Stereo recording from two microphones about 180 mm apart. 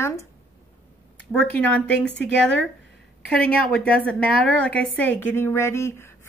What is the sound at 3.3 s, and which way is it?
A woman's voice, 5° left (ahead or behind).